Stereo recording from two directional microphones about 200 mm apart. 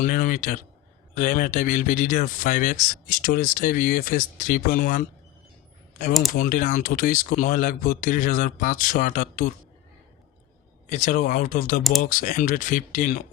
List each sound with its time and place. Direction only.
0.0 s speech: 45° left (ahead or behind)
6.3 s speech: 40° left (ahead or behind)
10.8 s speech: 35° left (ahead or behind)
11.8 s speech: centre (ahead or behind)
12.0 s speech: 40° left (ahead or behind)